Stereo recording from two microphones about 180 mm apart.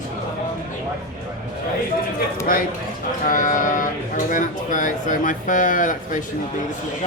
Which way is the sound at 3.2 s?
45° left (ahead or behind).